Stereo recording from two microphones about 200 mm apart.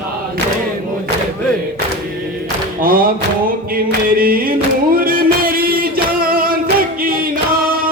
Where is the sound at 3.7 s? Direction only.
45° right (ahead or behind).